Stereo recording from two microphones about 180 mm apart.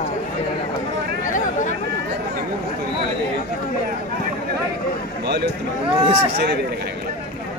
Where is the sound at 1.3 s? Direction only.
45° left (ahead or behind).